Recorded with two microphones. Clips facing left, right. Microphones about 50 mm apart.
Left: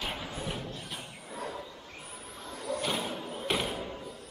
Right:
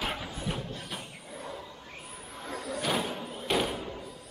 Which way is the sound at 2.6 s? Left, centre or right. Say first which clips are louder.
Right 1 dB; centre.